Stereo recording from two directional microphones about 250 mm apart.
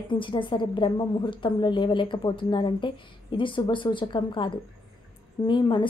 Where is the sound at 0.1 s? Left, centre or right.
Centre.